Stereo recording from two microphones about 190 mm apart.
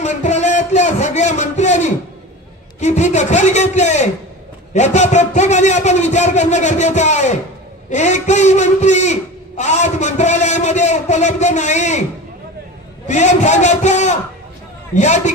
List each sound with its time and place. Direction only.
0.0 s a sound: 40° left (ahead or behind)
3.7 s speech: 35° left (ahead or behind)
13.0 s speech: 40° left (ahead or behind)